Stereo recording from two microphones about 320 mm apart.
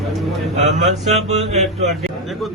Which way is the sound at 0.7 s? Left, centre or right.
Right.